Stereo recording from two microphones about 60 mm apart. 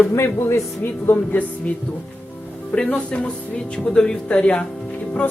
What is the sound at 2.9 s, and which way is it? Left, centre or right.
Speech, centre.